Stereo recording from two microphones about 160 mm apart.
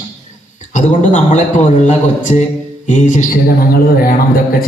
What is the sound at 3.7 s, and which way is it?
Speech, 65° left (ahead or behind).